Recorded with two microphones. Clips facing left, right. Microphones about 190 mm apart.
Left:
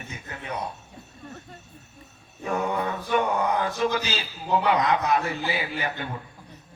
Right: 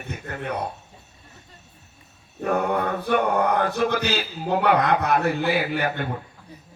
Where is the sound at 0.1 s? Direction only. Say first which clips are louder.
Right 6 dB; 60° right (ahead or behind).